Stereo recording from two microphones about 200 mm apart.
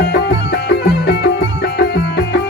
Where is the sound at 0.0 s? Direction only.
55° left (ahead or behind).